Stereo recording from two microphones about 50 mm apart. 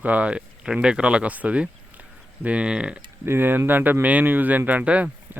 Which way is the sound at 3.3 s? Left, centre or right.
Right.